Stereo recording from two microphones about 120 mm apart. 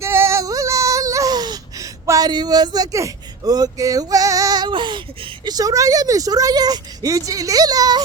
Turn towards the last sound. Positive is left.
turn(degrees=-30)  # may be behind; listen again after turning